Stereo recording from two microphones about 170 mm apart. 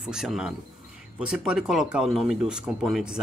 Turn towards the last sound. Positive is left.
turn(degrees=0)  # may be behind; listen again after turning